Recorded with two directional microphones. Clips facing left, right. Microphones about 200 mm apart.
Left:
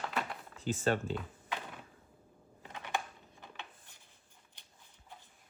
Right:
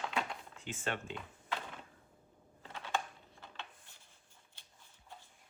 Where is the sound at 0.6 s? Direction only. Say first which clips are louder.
Left 8 dB; 35° left (ahead or behind).